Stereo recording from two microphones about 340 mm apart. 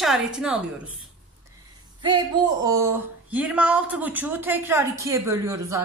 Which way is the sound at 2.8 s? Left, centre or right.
Centre.